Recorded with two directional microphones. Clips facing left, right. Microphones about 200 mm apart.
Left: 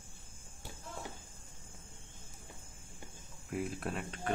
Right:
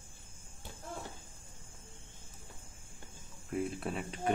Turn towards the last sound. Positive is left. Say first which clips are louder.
# right 3 dB
turn(degrees=-5)  # may be behind; listen again after turning